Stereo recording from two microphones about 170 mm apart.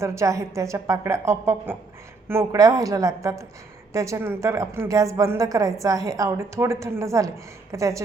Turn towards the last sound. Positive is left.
turn(degrees=-20)  # may be behind; listen again after turning